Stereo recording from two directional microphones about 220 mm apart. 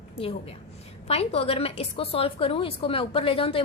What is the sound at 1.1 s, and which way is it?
A woman's voice, 25° left (ahead or behind).